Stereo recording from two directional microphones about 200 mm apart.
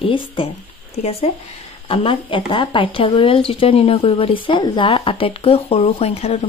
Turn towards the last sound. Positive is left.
turn(degrees=30)  # may be behind; listen again after turning